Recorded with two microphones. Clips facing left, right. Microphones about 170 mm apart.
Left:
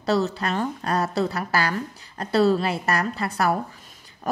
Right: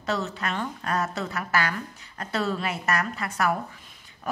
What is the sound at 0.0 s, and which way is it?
A woman's voice, 35° left (ahead or behind).